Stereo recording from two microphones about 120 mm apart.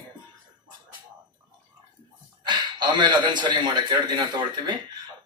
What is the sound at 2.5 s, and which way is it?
A man's voice, 40° right (ahead or behind).